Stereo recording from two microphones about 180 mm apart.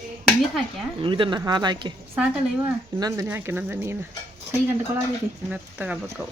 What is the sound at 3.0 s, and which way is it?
Speech, 20° right (ahead or behind).